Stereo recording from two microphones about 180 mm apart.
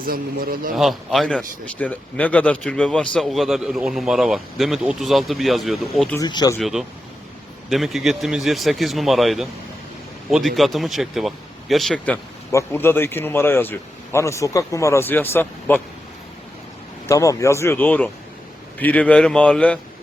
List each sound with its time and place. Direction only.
0.0 s a man's voice: 55° right (ahead or behind)
0.7 s a man's voice: centre (ahead or behind)
6.1 s speech: 20° left (ahead or behind)
6.6 s a man's voice: centre (ahead or behind)
17.1 s speech: 15° left (ahead or behind)